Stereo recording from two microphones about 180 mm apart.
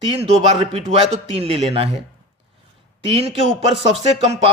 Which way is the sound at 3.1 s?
30° right (ahead or behind).